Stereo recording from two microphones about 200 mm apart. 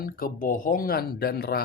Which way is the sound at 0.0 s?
45° left (ahead or behind).